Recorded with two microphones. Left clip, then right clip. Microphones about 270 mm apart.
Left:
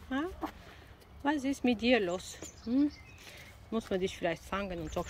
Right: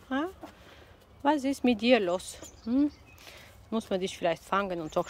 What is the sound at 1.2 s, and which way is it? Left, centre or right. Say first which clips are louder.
Speech: right 5 dB; centre.